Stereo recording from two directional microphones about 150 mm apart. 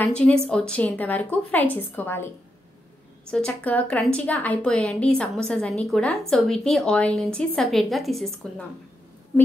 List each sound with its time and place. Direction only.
0.0 s a woman's voice: 5° left (ahead or behind)